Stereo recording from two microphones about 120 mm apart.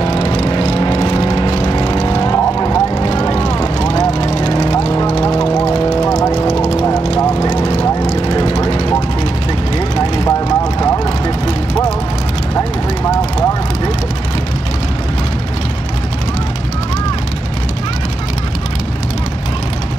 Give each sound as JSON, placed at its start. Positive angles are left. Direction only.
{"t": 0.0, "sound": "vehicle", "side_deg": 55}
{"t": 2.3, "sound": "vehicle", "side_deg": 25}
{"t": 3.0, "sound": "vehicle", "side_deg": 45}
{"t": 4.3, "sound": "vehicle", "side_deg": 55}
{"t": 6.0, "sound": "vehicle", "side_deg": 25}
{"t": 8.6, "sound": "vehicle", "side_deg": 55}
{"t": 10.2, "sound": "vehicle", "side_deg": 25}
{"t": 11.1, "sound": "vehicle", "side_deg": 40}
{"t": 12.5, "sound": "vehicle", "side_deg": 25}